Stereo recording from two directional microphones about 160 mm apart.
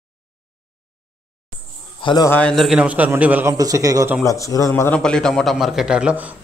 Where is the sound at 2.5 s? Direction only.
Centre (ahead or behind).